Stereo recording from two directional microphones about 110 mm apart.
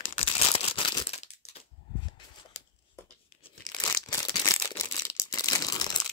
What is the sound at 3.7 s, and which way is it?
Crumpling, 40° left (ahead or behind).